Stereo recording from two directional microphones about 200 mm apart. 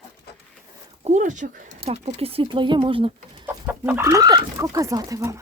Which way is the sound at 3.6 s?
10° right (ahead or behind).